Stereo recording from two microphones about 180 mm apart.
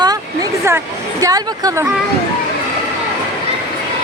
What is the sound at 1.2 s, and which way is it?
Speech, 20° right (ahead or behind).